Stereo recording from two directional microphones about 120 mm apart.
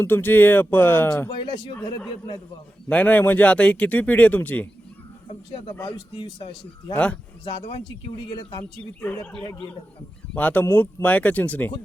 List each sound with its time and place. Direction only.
0.0 s speech: 15° left (ahead or behind)
1.3 s a man's voice: 45° left (ahead or behind)
2.9 s speech: 10° left (ahead or behind)
5.3 s a man's voice: 50° left (ahead or behind)
6.9 s speech: 10° left (ahead or behind)
7.4 s a man's voice: 55° left (ahead or behind)
10.3 s speech: 15° left (ahead or behind)